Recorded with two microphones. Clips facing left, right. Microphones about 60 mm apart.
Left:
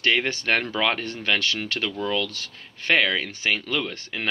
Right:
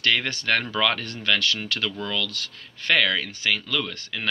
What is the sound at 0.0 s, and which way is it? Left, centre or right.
Speech, left.